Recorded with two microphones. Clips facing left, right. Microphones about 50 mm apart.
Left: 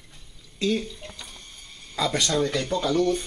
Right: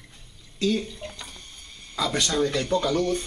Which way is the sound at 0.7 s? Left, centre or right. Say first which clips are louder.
Even; centre.